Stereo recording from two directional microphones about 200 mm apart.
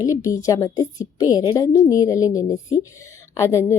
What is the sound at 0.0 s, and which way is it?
A woman's voice, 15° left (ahead or behind).